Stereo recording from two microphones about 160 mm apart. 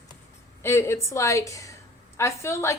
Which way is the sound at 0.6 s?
15° left (ahead or behind).